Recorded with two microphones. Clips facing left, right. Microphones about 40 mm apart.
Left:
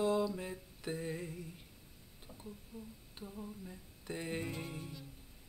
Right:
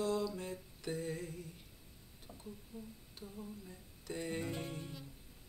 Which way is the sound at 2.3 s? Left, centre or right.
Centre.